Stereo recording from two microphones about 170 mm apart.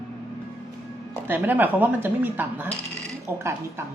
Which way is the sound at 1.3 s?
10° right (ahead or behind).